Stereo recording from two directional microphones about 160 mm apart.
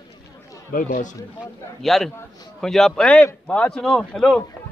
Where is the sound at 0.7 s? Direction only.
55° left (ahead or behind).